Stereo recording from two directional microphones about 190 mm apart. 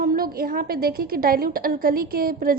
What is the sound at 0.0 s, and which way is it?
A woman's voice, 50° right (ahead or behind).